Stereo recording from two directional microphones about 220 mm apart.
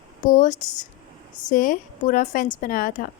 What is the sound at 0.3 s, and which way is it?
Speech, 40° left (ahead or behind).